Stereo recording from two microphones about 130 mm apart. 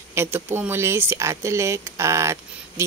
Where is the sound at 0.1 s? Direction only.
20° right (ahead or behind).